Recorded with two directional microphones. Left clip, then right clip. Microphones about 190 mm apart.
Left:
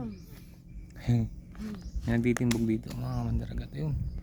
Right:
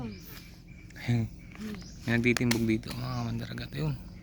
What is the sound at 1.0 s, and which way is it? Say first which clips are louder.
Speech: left 1 dB; 30° left (ahead or behind).